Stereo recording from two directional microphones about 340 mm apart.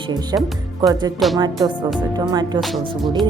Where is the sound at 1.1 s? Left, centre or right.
Centre.